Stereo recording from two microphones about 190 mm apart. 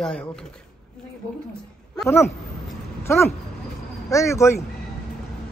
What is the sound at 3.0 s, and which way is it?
Speech, 15° left (ahead or behind).